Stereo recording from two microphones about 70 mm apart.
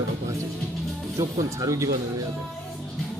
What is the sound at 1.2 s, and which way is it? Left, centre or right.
Speech, right.